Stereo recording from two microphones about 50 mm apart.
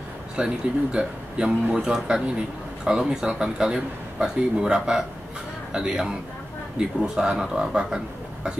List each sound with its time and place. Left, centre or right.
0.4 s a man's voice: right